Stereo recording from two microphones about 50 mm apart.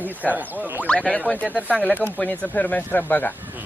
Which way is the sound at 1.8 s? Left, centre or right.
Left.